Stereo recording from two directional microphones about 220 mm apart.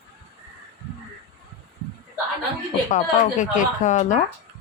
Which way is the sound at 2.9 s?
35° left (ahead or behind).